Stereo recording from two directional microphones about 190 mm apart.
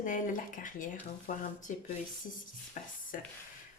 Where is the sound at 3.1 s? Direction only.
45° left (ahead or behind).